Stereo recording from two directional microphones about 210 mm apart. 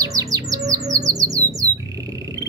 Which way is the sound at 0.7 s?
15° right (ahead or behind).